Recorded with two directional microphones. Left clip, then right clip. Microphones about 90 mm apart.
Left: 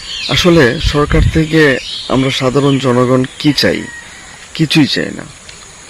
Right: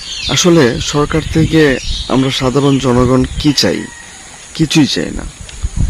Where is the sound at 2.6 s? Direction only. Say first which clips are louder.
Right 1 dB; 35° right (ahead or behind).